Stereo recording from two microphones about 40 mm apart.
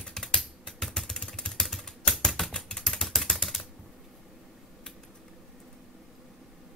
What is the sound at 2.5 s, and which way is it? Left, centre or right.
Typing, centre.